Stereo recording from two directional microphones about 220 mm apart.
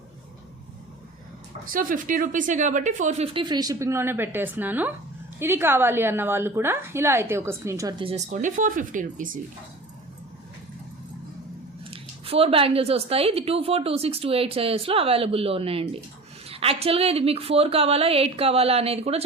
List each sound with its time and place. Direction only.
1.6 s a woman's voice: 40° right (ahead or behind)
11.9 s speech: 25° right (ahead or behind)